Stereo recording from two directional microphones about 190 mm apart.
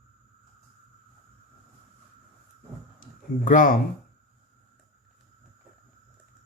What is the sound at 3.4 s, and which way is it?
Speech, 45° left (ahead or behind).